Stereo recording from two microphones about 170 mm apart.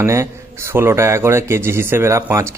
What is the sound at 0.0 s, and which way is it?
Speech, 15° right (ahead or behind).